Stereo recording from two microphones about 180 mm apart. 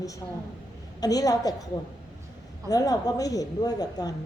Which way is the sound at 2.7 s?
20° left (ahead or behind).